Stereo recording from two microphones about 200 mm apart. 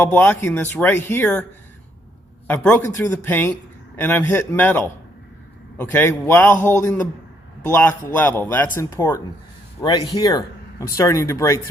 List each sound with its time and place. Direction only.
0.0 s speech: 10° left (ahead or behind)
2.5 s speech: 10° left (ahead or behind)